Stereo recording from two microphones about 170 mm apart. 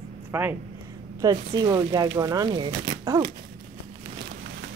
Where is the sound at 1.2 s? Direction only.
25° right (ahead or behind).